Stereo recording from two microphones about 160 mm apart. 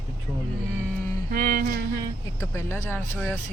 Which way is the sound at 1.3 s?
60° right (ahead or behind).